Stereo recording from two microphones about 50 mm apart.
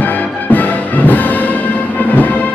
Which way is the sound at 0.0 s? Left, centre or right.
Left.